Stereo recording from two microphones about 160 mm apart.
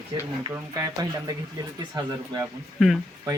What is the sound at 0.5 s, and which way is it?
Speech, 20° right (ahead or behind).